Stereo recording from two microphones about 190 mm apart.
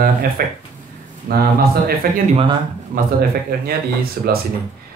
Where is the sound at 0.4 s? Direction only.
50° right (ahead or behind).